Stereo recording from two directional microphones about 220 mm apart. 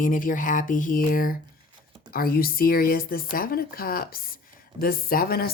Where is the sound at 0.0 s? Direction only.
40° left (ahead or behind).